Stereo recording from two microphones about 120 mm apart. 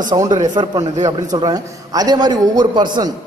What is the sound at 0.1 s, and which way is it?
A man's voice, 35° right (ahead or behind).